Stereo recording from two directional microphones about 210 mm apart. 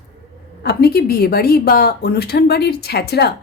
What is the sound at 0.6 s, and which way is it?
A woman's voice, 50° left (ahead or behind).